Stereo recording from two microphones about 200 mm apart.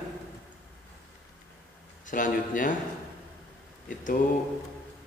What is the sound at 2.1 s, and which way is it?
Speech, 40° left (ahead or behind).